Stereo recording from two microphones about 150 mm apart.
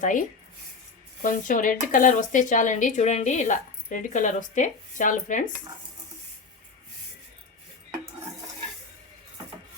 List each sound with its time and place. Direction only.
0.0 s speech: 60° left (ahead or behind)